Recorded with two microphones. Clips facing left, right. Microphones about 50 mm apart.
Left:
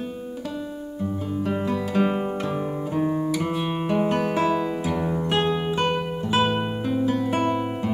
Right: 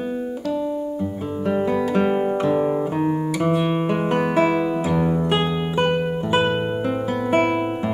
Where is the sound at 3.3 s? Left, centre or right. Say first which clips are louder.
Right 5 dB; centre.